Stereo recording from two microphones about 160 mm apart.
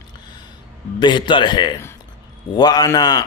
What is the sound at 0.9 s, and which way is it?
A man's voice, 30° left (ahead or behind).